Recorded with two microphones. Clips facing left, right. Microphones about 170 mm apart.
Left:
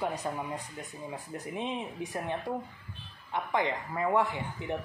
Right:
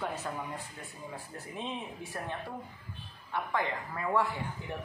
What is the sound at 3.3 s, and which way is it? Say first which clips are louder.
Speech: left 3 dB; 20° left (ahead or behind).